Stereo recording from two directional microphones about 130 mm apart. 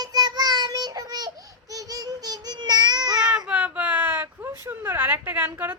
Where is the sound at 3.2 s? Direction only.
5° right (ahead or behind).